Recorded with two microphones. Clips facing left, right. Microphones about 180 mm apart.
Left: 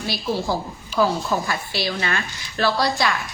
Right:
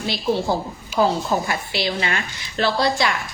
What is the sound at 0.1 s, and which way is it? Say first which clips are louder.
A woman's voice: right 3 dB; 25° right (ahead or behind).